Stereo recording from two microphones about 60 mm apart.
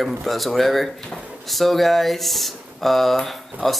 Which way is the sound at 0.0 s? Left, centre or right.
Centre.